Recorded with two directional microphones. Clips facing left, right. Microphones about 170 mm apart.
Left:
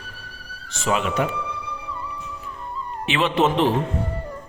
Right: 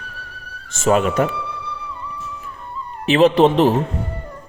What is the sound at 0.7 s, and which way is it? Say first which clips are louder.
Speech: right 7 dB; 45° right (ahead or behind).